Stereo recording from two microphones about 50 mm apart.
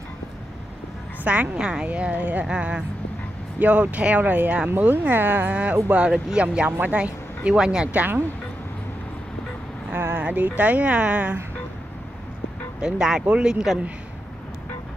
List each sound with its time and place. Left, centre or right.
1.2 s a woman's voice: right
2.4 s a woman's voice: right
3.5 s speech: right
4.2 s speech: right
5.9 s a woman's voice: right
7.4 s speech: centre
7.9 s speech: right
10.1 s a woman's voice: right
12.8 s a woman's voice: centre